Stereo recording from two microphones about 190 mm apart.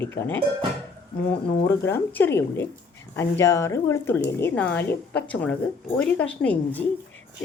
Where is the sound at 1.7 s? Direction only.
10° left (ahead or behind).